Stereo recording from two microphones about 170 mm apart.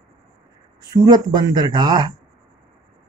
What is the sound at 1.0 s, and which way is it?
Speech, 25° right (ahead or behind).